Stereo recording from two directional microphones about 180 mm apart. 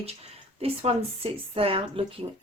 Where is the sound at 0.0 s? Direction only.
35° right (ahead or behind).